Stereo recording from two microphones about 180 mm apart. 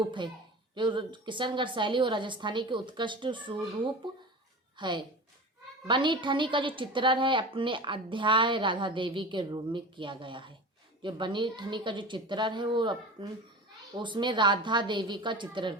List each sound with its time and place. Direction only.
0.0 s a woman's voice: 25° right (ahead or behind)
4.8 s a woman's voice: 25° right (ahead or behind)